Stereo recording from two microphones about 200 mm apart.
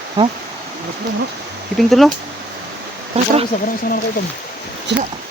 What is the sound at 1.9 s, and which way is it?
Speech, centre (ahead or behind).